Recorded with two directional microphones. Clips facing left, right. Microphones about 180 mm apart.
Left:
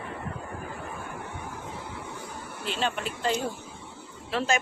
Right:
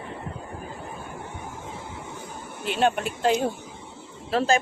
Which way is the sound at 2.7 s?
55° right (ahead or behind).